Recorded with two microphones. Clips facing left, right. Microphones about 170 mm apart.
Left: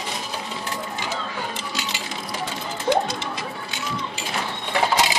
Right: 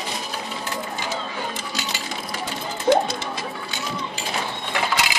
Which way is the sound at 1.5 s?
40° right (ahead or behind).